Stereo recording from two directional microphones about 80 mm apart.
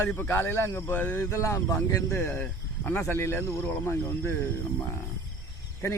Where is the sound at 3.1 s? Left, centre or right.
Left.